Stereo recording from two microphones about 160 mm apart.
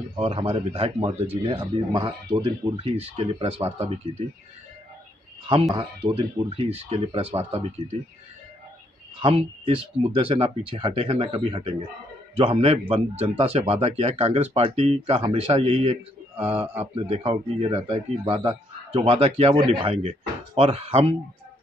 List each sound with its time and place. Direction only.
0.1 s speech: 40° right (ahead or behind)
5.8 s speech: 30° right (ahead or behind)
9.2 s speech: 35° right (ahead or behind)